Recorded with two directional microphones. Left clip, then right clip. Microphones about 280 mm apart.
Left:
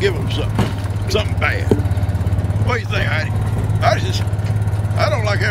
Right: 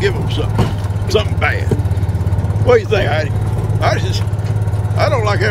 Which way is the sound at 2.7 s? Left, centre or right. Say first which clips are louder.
Right 9 dB; centre.